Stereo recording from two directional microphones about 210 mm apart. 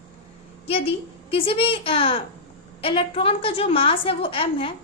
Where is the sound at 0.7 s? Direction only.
25° left (ahead or behind).